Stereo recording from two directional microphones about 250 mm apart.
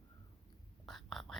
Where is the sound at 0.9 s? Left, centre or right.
Centre.